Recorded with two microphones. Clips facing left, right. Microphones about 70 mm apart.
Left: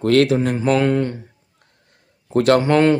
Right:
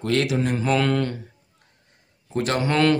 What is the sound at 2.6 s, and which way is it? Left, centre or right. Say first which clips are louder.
Speech: left 5 dB; left.